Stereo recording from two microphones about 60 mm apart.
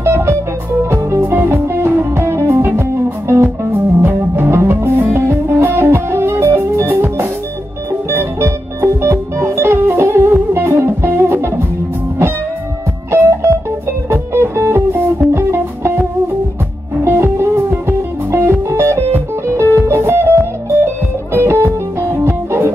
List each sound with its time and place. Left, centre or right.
0.0 s music: right
13.1 s music: right